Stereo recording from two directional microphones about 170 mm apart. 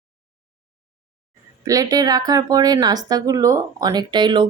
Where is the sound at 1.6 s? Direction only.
20° right (ahead or behind).